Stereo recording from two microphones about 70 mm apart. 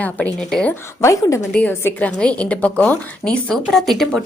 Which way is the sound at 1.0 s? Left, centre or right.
Left.